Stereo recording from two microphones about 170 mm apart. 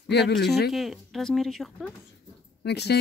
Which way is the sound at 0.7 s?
Centre (ahead or behind).